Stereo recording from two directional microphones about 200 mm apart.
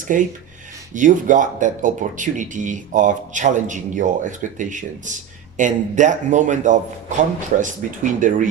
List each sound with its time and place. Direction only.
0.0 s speech: 40° right (ahead or behind)